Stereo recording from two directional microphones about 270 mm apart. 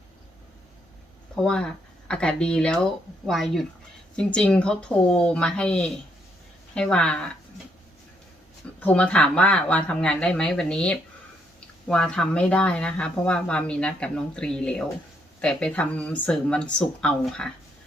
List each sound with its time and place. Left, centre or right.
1.4 s speech: centre
8.8 s speech: centre